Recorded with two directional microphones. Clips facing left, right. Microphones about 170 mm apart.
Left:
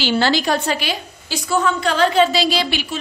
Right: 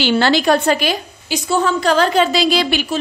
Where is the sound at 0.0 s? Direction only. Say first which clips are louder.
Right 3 dB; 60° right (ahead or behind).